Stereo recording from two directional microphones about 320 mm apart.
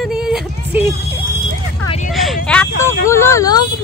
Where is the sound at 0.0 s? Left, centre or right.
Centre.